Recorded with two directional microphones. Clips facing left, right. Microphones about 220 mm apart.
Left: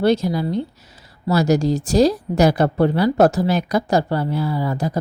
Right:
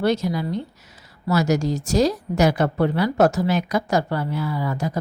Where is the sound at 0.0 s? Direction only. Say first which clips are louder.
Left 4 dB; 30° left (ahead or behind).